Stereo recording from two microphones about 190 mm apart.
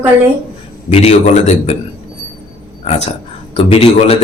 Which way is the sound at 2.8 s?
35° left (ahead or behind).